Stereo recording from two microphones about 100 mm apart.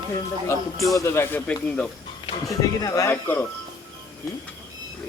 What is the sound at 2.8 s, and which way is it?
Speech, 35° left (ahead or behind).